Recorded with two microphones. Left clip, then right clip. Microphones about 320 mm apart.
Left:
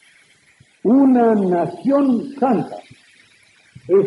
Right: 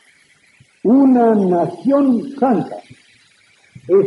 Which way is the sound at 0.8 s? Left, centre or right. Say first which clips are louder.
Right 2 dB; right.